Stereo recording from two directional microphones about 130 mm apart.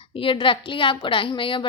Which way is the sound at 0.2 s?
40° left (ahead or behind).